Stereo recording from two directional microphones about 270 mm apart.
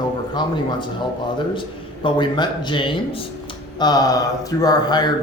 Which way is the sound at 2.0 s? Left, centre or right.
Centre.